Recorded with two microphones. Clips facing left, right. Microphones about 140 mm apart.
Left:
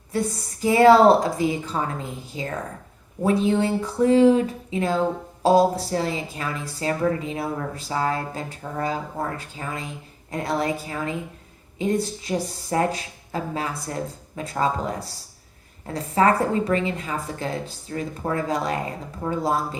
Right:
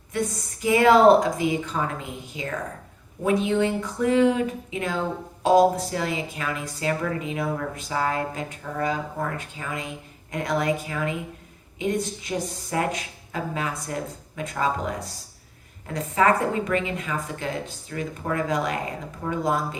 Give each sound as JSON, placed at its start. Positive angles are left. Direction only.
{"t": 0.1, "sound": "speech", "side_deg": 35}